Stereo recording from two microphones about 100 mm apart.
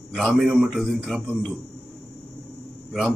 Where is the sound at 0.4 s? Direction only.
10° right (ahead or behind).